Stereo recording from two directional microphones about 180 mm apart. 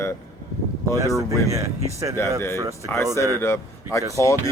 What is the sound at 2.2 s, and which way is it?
Speech, 15° left (ahead or behind).